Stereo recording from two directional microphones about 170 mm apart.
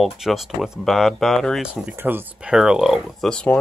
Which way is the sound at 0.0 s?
Centre (ahead or behind).